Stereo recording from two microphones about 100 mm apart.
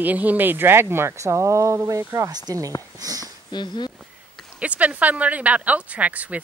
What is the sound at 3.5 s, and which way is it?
Speech, 50° left (ahead or behind).